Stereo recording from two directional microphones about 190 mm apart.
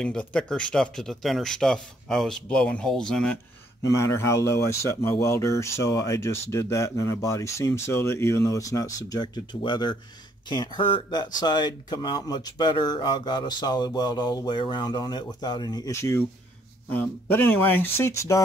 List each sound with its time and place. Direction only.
0.0 s speech: 5° left (ahead or behind)